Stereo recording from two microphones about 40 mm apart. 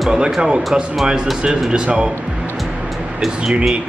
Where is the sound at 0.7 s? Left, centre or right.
Centre.